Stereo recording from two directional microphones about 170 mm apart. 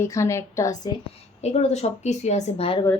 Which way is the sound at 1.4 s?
40° left (ahead or behind).